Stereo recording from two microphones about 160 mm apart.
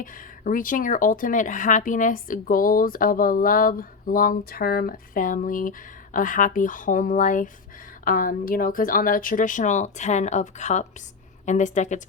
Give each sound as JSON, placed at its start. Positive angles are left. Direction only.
{"t": 0.0, "sound": "a woman's voice", "side_deg": 55}